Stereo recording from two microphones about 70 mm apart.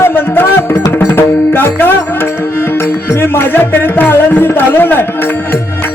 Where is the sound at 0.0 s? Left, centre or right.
Left.